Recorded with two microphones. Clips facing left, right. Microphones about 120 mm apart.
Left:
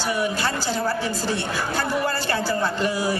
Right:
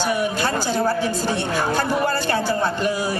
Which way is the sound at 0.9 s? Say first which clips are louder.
Right 4 dB; 50° right (ahead or behind).